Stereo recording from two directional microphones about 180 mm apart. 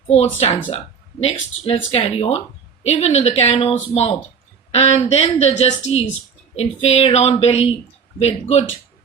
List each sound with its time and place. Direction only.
0.7 s speech: 35° left (ahead or behind)